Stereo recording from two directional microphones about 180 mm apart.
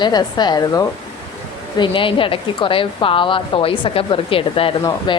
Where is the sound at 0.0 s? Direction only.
25° left (ahead or behind).